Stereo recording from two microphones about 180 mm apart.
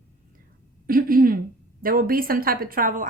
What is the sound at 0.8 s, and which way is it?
Speech, 55° right (ahead or behind).